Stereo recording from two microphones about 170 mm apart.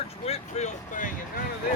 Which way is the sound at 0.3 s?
40° left (ahead or behind).